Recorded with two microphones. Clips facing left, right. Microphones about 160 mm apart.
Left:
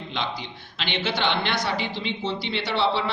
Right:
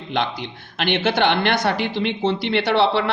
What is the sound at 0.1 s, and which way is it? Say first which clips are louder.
A man's voice: right 8 dB; 60° right (ahead or behind).